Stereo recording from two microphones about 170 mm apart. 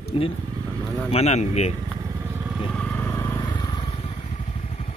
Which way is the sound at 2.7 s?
10° left (ahead or behind).